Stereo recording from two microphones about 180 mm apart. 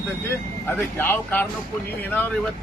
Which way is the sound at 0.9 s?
10° left (ahead or behind).